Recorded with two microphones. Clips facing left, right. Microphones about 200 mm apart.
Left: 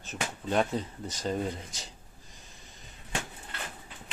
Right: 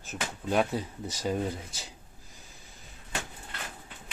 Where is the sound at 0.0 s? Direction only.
5° right (ahead or behind).